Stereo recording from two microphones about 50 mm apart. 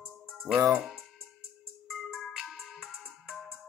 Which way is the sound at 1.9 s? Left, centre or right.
Centre.